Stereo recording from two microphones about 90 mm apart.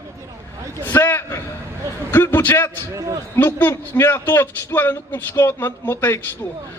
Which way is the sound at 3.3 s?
25° left (ahead or behind).